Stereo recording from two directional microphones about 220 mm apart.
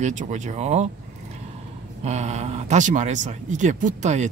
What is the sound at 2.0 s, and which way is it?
Speech, 30° right (ahead or behind).